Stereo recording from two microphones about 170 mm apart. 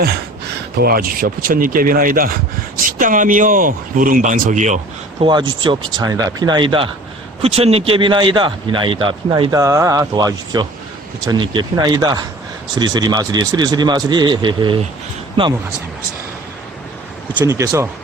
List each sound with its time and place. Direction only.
0.8 s speech: 60° right (ahead or behind)
5.2 s speech: 30° right (ahead or behind)
17.3 s speech: 20° right (ahead or behind)